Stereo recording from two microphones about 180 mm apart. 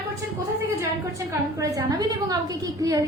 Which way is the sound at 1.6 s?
20° right (ahead or behind).